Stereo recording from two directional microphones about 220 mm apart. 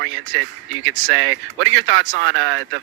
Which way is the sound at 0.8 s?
65° right (ahead or behind).